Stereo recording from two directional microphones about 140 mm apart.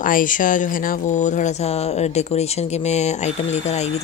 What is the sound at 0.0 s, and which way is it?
Speech, 75° left (ahead or behind).